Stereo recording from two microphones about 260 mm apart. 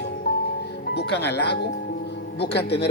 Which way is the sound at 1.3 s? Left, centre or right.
Left.